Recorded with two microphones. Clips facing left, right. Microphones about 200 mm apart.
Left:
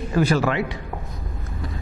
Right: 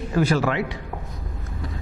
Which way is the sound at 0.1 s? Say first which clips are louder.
Left 1 dB; 15° left (ahead or behind).